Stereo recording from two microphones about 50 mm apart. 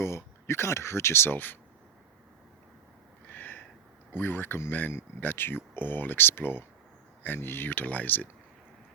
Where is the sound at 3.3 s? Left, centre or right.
Left.